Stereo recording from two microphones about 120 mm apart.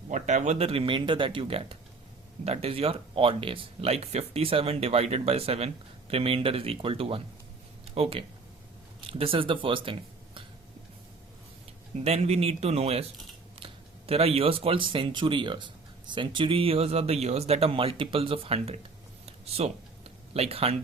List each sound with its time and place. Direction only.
0.1 s speech: 85° right; by 10.4 s 45° right (ahead or behind)
11.9 s speech: 60° right (ahead or behind)
14.1 s speech: 55° right (ahead or behind)
19.2 s a sound: 60° right (ahead or behind)